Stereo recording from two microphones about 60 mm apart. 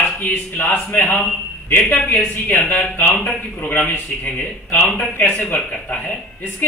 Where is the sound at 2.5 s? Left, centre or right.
Left.